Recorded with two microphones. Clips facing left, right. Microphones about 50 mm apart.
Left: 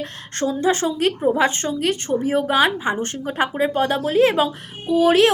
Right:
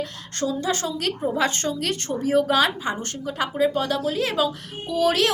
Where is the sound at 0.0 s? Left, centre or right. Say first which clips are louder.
Left 3 dB; left.